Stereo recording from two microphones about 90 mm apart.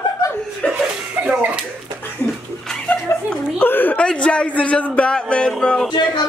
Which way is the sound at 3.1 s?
25° left (ahead or behind).